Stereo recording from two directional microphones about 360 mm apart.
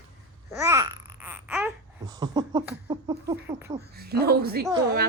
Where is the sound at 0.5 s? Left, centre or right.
Centre.